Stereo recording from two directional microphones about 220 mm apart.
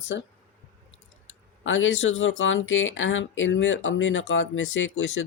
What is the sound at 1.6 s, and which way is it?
Speech, 60° left (ahead or behind).